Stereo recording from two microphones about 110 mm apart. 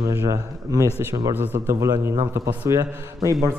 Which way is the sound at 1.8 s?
30° right (ahead or behind).